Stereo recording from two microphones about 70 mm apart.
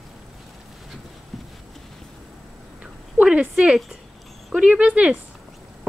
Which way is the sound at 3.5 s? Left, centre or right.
Centre.